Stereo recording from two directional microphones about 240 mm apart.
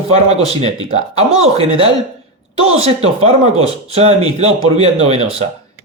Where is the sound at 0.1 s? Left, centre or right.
Right.